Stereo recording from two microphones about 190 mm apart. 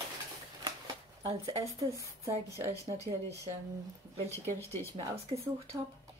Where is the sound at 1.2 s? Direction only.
30° right (ahead or behind).